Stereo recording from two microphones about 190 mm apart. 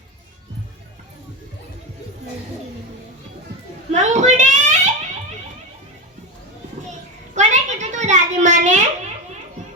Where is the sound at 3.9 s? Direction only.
40° right (ahead or behind).